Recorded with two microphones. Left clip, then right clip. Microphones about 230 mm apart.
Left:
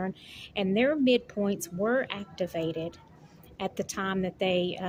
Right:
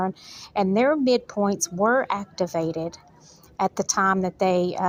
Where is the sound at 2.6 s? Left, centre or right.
Right.